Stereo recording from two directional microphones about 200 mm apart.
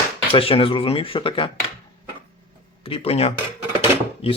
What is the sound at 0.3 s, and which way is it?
Speech, 25° left (ahead or behind).